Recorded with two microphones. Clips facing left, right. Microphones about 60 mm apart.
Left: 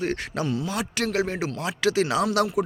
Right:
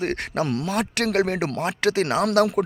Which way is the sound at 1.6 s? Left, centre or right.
Right.